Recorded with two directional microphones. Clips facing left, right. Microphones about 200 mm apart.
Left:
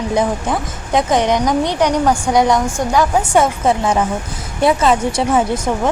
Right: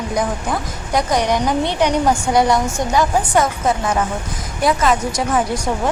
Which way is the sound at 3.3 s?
25° left (ahead or behind).